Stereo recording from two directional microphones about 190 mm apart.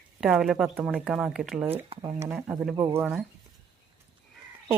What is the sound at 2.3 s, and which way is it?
Speech, 5° right (ahead or behind).